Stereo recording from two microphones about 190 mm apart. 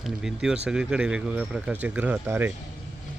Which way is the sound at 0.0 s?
Centre (ahead or behind).